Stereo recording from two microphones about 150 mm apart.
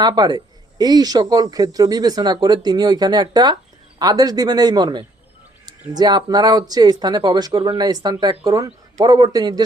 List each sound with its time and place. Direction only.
0.0 s speech: 30° right (ahead or behind)